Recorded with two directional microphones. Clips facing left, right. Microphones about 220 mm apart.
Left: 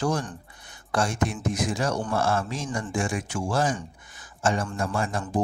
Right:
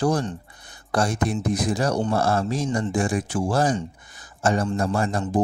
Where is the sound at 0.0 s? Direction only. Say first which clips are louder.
Right 4 dB; 35° right (ahead or behind).